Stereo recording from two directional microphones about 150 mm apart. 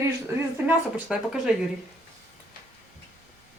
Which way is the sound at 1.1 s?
5° right (ahead or behind).